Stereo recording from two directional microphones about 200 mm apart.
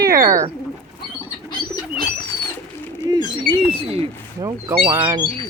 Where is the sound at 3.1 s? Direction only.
20° right (ahead or behind).